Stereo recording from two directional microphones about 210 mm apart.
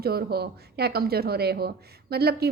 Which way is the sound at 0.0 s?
50° right (ahead or behind).